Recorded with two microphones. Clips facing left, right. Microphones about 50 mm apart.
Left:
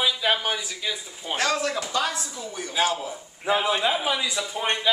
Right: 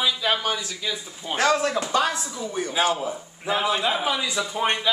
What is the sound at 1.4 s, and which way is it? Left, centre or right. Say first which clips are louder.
Speech: right 4 dB; right.